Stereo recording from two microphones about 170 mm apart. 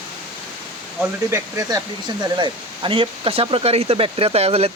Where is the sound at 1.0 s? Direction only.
15° right (ahead or behind).